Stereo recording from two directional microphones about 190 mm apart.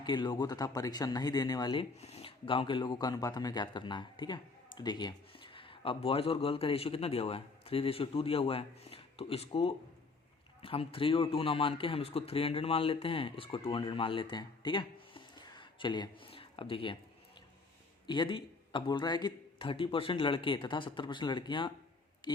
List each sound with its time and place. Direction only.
0.0 s speech: 25° left (ahead or behind)
18.0 s speech: 25° left (ahead or behind)